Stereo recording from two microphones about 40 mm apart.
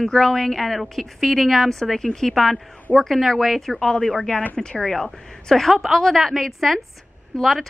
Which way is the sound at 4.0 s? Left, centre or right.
Centre.